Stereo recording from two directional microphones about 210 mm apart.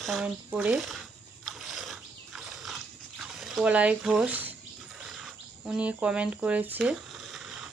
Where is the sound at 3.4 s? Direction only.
Centre (ahead or behind).